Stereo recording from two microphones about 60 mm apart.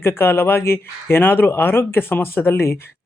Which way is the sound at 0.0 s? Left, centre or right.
Left.